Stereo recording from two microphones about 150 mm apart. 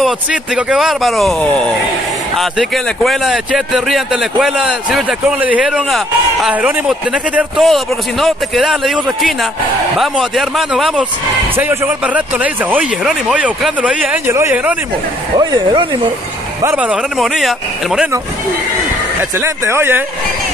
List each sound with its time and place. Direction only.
0.0 s speech: 5° right (ahead or behind)
2.3 s speech: centre (ahead or behind)
11.5 s speech: 15° right (ahead or behind)
15.3 s speech: 30° right (ahead or behind)
16.6 s speech: 10° right (ahead or behind)
19.4 s speech: 15° right (ahead or behind)